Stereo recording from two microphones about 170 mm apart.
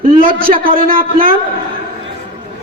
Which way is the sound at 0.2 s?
55° right (ahead or behind).